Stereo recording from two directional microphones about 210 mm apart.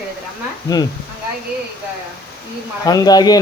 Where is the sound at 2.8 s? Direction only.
15° left (ahead or behind).